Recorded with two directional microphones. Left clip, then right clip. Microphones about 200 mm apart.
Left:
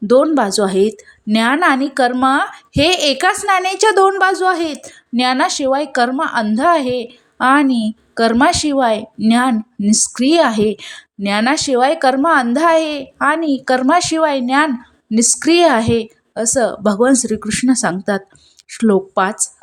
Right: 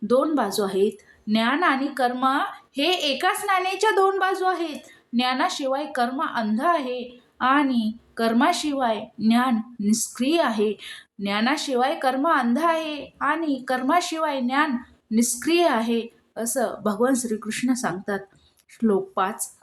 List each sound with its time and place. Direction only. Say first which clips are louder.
0.1 s a woman's voice: left 9 dB; 40° left (ahead or behind)